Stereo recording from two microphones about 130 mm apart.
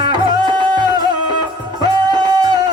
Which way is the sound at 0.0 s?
35° right (ahead or behind).